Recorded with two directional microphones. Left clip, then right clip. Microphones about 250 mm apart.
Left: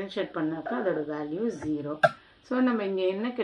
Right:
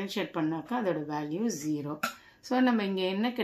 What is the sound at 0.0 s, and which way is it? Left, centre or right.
Speech, right.